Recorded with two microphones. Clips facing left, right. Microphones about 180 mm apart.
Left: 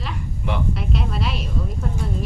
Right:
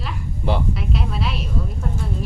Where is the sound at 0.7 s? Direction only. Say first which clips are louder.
Even; centre (ahead or behind).